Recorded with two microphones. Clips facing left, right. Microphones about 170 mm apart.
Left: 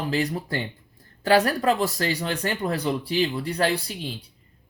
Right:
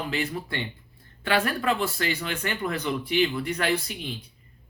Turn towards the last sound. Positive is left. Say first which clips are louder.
# left 3 dB
turn(degrees=35)  # may be behind; listen again after turning